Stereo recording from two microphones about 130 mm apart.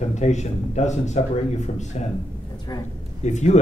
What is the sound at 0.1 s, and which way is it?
A man's voice, 65° left (ahead or behind).